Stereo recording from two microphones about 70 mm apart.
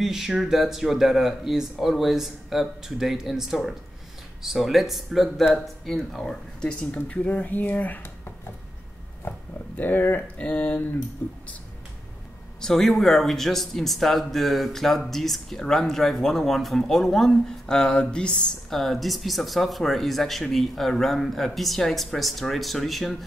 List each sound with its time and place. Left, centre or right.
0.0 s speech: centre; by 8.1 s left
9.8 s speech: left
12.5 s speech: centre